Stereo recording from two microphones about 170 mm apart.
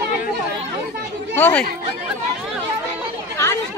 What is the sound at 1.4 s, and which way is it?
Speech, 10° left (ahead or behind).